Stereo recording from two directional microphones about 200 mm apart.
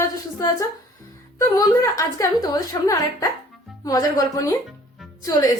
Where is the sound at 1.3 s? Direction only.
15° left (ahead or behind).